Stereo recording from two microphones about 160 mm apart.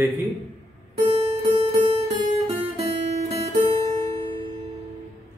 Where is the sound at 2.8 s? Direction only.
45° right (ahead or behind).